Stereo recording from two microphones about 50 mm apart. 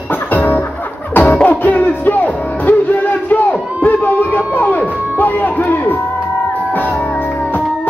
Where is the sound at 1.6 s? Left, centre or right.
Left.